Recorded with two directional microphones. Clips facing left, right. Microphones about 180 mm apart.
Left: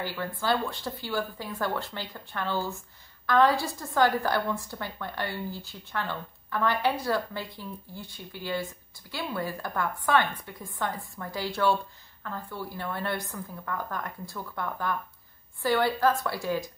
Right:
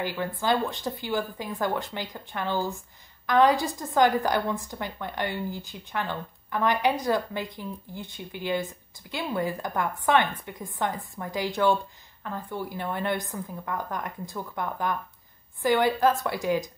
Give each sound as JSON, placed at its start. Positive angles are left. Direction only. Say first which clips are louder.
{"t": 0.0, "sound": "a woman's voice", "louder": "right 3 dB", "side_deg": -20}